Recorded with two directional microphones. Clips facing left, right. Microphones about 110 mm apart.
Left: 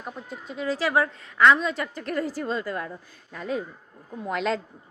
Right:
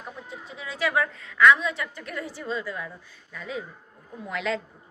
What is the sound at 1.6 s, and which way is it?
A woman's voice, 45° left (ahead or behind).